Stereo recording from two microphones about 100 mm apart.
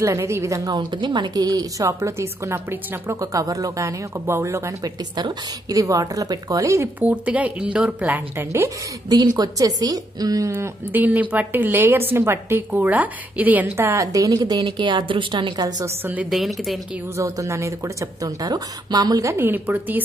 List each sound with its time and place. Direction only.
0.0 s a woman's voice: 30° right (ahead or behind)
3.2 s a woman's voice: 35° right (ahead or behind)
7.0 s a woman's voice: 15° right (ahead or behind)
8.5 s a woman's voice: 30° right (ahead or behind)
15.8 s a woman's voice: 20° right (ahead or behind)
16.3 s a woman's voice: centre (ahead or behind)
17.2 s a woman's voice: 30° right (ahead or behind)
19.3 s a woman's voice: 20° right (ahead or behind)